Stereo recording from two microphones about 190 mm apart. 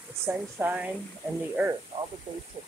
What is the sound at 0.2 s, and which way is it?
Speech, 10° right (ahead or behind).